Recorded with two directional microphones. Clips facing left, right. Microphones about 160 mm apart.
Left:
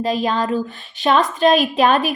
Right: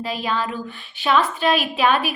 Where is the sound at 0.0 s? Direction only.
40° left (ahead or behind).